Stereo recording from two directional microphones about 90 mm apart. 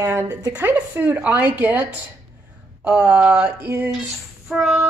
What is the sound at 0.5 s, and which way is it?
A woman's voice, 15° right (ahead or behind).